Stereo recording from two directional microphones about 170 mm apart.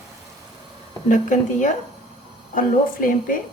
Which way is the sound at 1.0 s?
50° left (ahead or behind).